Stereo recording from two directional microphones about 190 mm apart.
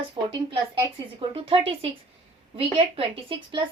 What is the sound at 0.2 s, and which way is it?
A woman's voice, 25° right (ahead or behind).